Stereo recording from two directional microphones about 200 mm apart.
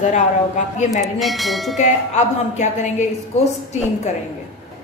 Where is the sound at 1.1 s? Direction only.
Centre (ahead or behind).